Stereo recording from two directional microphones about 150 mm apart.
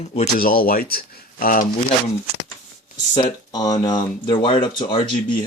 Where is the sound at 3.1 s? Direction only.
30° left (ahead or behind).